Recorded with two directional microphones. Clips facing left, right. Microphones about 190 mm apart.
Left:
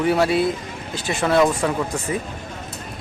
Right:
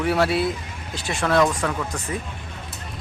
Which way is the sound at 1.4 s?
20° left (ahead or behind).